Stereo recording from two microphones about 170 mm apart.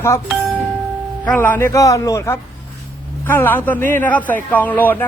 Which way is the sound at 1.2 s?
10° left (ahead or behind).